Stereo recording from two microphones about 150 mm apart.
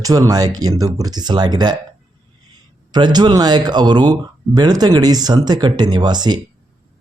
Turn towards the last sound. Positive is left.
turn(degrees=-30)  # may be behind; listen again after turning